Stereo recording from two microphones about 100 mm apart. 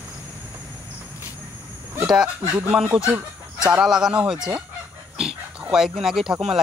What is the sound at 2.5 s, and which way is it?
Speech, 10° right (ahead or behind).